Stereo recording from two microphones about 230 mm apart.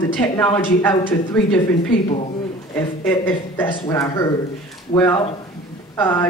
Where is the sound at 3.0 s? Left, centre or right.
Centre.